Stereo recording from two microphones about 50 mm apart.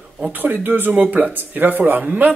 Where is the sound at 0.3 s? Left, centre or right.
Right.